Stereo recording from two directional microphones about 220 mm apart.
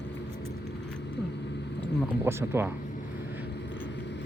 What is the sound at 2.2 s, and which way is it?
Speech, 10° right (ahead or behind).